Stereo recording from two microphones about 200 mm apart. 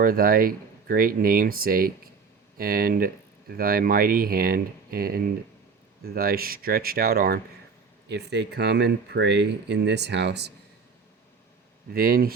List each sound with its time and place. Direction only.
0.0 s speech: 45° right (ahead or behind)
11.9 s speech: 45° right (ahead or behind)